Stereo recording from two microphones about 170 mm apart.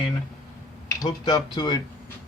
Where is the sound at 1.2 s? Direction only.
25° left (ahead or behind).